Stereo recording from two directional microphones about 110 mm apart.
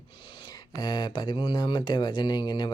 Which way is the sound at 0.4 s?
40° left (ahead or behind).